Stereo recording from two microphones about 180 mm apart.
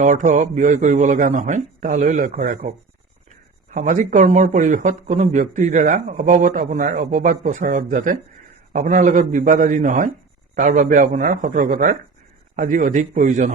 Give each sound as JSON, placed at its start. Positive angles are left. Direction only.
{"t": 0.0, "sound": "speech", "side_deg": -45}